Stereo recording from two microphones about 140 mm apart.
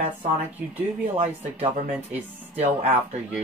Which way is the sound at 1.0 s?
45° right (ahead or behind).